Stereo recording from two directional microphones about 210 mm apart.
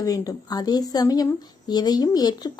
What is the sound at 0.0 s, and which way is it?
A woman's voice, 15° left (ahead or behind).